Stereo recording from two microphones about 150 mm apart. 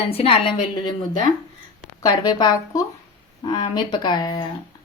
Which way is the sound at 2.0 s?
25° left (ahead or behind).